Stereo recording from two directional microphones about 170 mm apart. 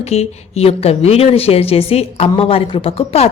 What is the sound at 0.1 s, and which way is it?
A woman's voice, 40° left (ahead or behind).